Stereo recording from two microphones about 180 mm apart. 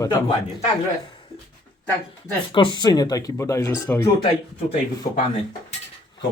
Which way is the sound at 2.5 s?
25° left (ahead or behind).